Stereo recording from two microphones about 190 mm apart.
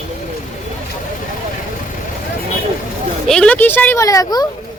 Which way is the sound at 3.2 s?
5° left (ahead or behind).